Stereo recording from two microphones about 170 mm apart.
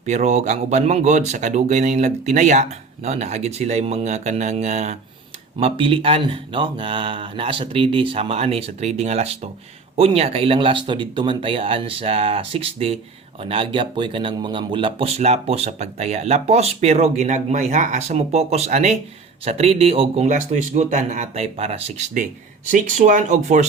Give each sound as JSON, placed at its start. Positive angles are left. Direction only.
{"t": 0.0, "sound": "speech", "side_deg": -40}